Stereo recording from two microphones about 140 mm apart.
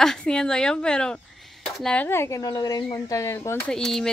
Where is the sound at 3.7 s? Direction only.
5° left (ahead or behind).